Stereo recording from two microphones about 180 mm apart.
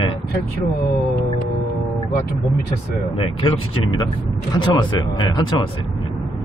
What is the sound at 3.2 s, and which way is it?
Speech, 30° left (ahead or behind).